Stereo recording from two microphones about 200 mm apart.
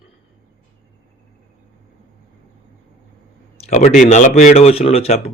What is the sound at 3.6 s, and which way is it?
Speech, 35° left (ahead or behind).